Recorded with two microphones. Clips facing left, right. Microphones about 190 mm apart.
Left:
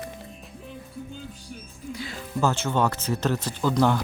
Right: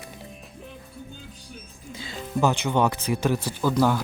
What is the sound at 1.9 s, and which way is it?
Speech, 25° right (ahead or behind).